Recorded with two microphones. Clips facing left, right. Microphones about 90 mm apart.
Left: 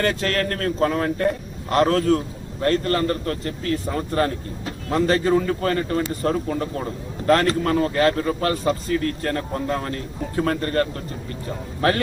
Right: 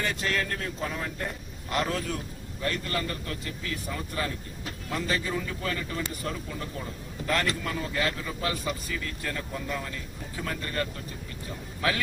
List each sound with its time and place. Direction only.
0.0 s a man's voice: 75° left (ahead or behind); by 4.4 s 50° left (ahead or behind)
4.6 s speech: 35° left (ahead or behind)
5.2 s a man's voice: 50° left (ahead or behind)